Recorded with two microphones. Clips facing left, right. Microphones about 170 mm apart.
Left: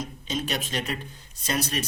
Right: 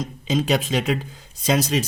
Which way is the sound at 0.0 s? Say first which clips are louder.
Right 8 dB; 90° right.